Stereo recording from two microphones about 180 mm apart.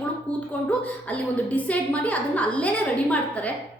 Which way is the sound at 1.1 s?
10° left (ahead or behind).